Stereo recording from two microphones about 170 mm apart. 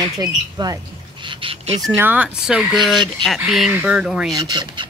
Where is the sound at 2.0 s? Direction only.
10° right (ahead or behind).